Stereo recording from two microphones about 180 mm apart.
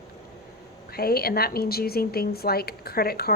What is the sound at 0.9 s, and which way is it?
A woman's voice, 60° left (ahead or behind).